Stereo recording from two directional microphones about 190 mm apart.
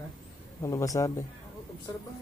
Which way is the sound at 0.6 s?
15° left (ahead or behind).